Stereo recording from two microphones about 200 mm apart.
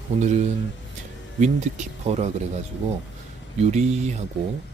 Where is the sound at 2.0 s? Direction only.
35° right (ahead or behind).